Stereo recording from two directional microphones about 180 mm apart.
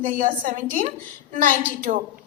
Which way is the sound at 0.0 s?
45° right (ahead or behind).